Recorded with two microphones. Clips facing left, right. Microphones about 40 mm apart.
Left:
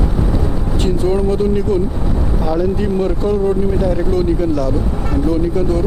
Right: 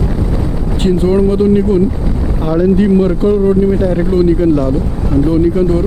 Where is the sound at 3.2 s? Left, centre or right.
Right.